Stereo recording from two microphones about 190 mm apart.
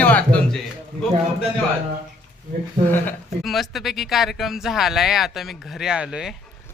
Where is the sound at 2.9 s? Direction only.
5° left (ahead or behind).